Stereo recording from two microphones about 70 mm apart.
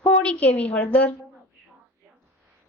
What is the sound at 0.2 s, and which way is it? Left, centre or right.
Speech, centre.